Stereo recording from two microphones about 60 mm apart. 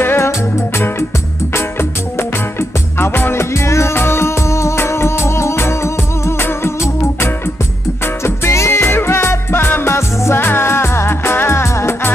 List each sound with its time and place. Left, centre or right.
0.0 s music: left
1.5 s music: left